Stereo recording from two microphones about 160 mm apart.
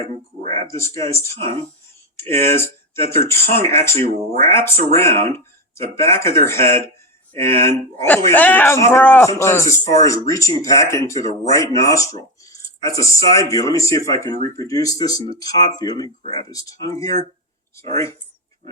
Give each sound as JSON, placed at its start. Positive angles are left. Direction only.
{"t": 0.7, "sound": "a man's voice", "side_deg": 15}